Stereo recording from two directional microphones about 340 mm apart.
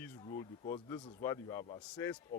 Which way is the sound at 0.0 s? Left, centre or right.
Centre.